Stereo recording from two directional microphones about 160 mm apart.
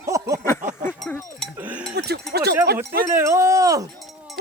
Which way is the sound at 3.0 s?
15° right (ahead or behind).